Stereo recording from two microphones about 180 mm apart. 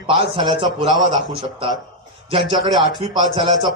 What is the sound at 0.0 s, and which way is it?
Speech, 30° right (ahead or behind).